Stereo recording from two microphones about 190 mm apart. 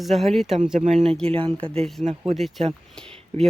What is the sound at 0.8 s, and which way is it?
Speech, 35° right (ahead or behind).